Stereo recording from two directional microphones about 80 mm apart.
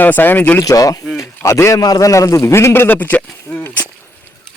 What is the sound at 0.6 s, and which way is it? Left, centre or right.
A man's voice, left.